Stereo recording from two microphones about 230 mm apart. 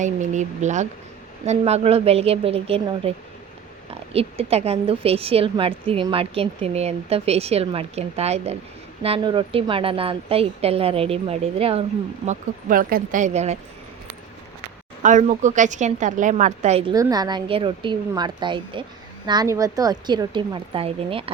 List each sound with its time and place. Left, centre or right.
0.0 s a woman's voice: right
4.1 s a woman's voice: right
15.0 s a woman's voice: right
16.9 s a woman's voice: centre